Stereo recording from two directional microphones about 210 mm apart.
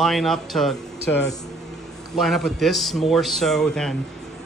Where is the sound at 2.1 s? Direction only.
Centre (ahead or behind).